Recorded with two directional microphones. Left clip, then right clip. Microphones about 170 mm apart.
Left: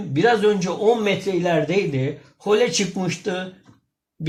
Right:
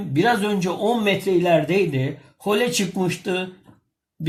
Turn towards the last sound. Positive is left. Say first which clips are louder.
# right 2 dB
turn(degrees=-5)  # may be behind; listen again after turning